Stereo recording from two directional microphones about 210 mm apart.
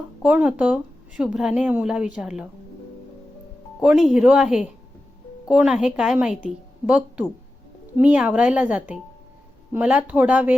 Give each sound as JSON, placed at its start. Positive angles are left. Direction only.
{"t": 0.2, "sound": "speech", "side_deg": -5}
{"t": 3.8, "sound": "speech", "side_deg": 0}